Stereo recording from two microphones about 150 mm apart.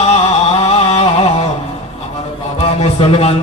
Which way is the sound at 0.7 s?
45° left (ahead or behind).